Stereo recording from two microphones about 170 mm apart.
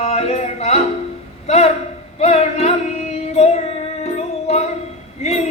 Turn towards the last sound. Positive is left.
turn(degrees=40)  # may be behind; listen again after turning